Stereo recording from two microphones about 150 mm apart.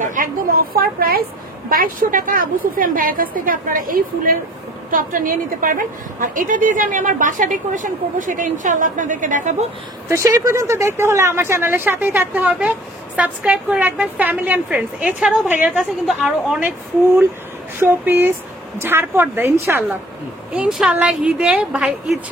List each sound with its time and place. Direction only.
0.0 s a woman's voice: 65° right (ahead or behind); by 1.2 s 90° right
1.7 s a woman's voice: 70° right (ahead or behind)
10.0 s a woman's voice: 20° right (ahead or behind)
17.7 s speech: 15° right (ahead or behind)
20.5 s a woman's voice: 5° right (ahead or behind)